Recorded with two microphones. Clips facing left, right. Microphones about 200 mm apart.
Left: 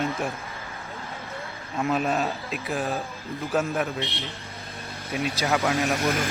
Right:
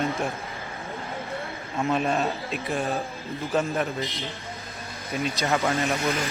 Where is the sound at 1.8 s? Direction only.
Centre (ahead or behind).